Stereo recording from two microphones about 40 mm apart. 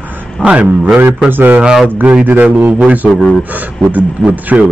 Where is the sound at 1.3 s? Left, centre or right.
Right.